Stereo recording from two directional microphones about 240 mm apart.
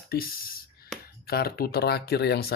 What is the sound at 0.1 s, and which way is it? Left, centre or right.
Speech, left.